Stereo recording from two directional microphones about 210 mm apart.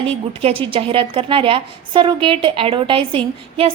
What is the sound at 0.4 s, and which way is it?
A woman's voice, 25° right (ahead or behind).